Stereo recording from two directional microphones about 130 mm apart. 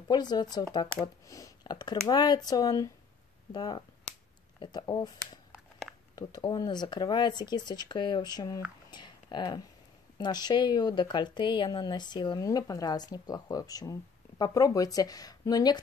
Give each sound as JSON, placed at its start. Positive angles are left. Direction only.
{"t": 0.1, "sound": "speech", "side_deg": 35}
{"t": 6.5, "sound": "speech", "side_deg": 30}
{"t": 8.9, "sound": "a sound", "side_deg": 35}
{"t": 10.1, "sound": "speech", "side_deg": 30}